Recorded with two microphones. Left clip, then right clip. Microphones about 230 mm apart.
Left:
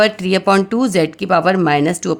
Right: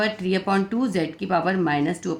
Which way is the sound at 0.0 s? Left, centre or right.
Left.